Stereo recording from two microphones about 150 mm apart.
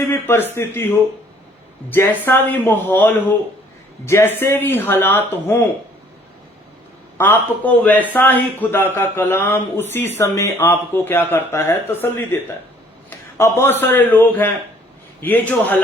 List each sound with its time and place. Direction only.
0.0 s a man's voice: 15° left (ahead or behind)
7.2 s a man's voice: 10° left (ahead or behind)